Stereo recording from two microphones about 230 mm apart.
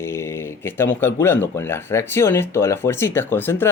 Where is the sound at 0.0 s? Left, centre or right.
Centre.